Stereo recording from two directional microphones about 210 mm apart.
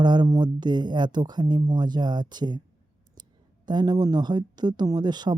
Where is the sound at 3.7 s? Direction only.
20° right (ahead or behind).